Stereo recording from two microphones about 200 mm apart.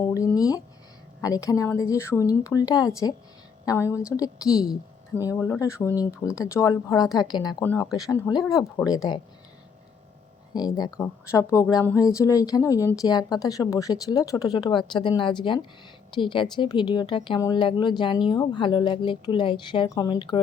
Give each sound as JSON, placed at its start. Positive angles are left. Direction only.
{"t": 0.0, "sound": "a sound", "side_deg": 15}
{"t": 1.2, "sound": "speech", "side_deg": 15}
{"t": 4.4, "sound": "speech", "side_deg": -5}
{"t": 5.3, "sound": "speech", "side_deg": 15}
{"t": 10.5, "sound": "speech", "side_deg": 20}